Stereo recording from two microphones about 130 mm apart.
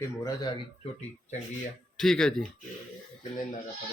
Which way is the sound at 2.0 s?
5° left (ahead or behind).